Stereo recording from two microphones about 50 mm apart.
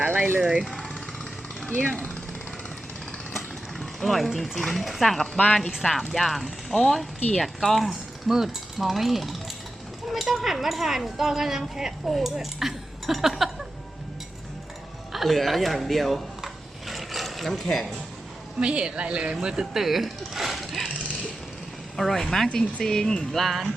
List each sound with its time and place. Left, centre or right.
0.1 s speech: right
0.3 s speech: centre
3.3 s vehicle: centre
4.3 s speech: centre
4.5 s speech: centre
15.1 s a sound: centre
18.6 s speech: centre
21.9 s speech: centre